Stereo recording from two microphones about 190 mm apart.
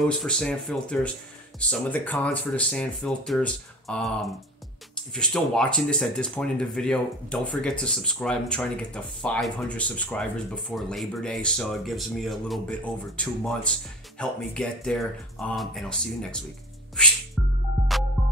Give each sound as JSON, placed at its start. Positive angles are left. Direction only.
{"t": 0.0, "sound": "speech", "side_deg": 5}